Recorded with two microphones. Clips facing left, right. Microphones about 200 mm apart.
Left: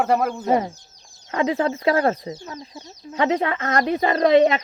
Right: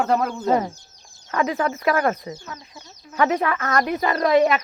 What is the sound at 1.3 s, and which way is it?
Speech, 25° left (ahead or behind).